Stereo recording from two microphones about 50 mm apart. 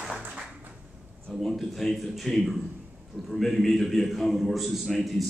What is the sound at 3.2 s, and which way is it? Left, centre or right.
A man's voice, centre.